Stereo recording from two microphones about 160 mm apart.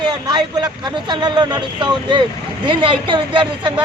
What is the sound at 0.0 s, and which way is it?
Speech, 25° right (ahead or behind).